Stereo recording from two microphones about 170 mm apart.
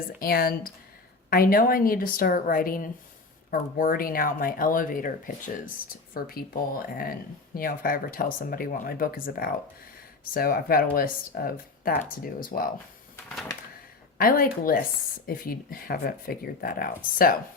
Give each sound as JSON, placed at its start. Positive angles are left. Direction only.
{"t": 0.2, "sound": "speech", "side_deg": 60}
{"t": 7.5, "sound": "speech", "side_deg": 55}
{"t": 14.2, "sound": "speech", "side_deg": 60}